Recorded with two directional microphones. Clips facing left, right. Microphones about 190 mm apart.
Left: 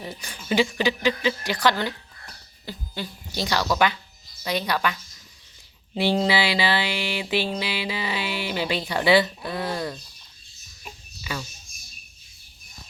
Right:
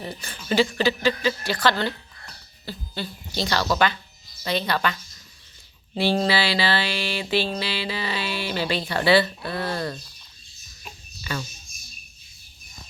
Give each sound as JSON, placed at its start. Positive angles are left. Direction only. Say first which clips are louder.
{"t": 0.0, "sound": "mantra", "louder": "right 1 dB", "side_deg": 10}
{"t": 0.7, "sound": "speech", "louder": "right 1 dB", "side_deg": 15}
{"t": 4.4, "sound": "mantra", "louder": "right 1 dB", "side_deg": 10}
{"t": 6.0, "sound": "mantra", "louder": "even", "side_deg": 20}
{"t": 10.8, "sound": "a sound", "louder": "right 1 dB", "side_deg": 5}